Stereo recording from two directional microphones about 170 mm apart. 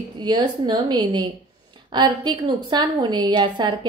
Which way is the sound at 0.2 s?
25° right (ahead or behind).